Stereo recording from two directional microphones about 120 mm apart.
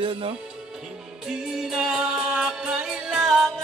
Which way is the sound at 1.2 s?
5° right (ahead or behind).